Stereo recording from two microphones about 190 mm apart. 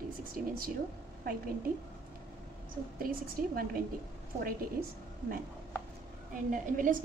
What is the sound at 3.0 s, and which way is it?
A woman's voice, 50° right (ahead or behind).